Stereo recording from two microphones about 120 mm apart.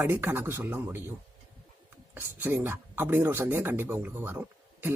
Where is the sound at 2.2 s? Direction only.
20° right (ahead or behind).